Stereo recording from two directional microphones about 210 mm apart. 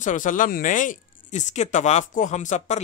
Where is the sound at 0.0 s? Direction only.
40° left (ahead or behind).